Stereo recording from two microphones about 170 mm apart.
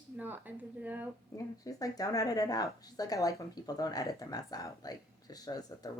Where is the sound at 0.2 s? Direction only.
10° right (ahead or behind).